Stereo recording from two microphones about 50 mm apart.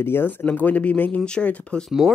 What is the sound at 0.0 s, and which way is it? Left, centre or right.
Speech, left.